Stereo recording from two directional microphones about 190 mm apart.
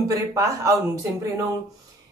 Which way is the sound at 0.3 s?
15° right (ahead or behind).